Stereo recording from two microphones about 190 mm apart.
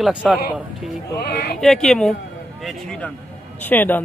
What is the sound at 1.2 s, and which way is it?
Speech, 55° left (ahead or behind).